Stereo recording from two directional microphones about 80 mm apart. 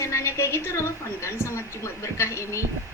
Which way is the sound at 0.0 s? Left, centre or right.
Left.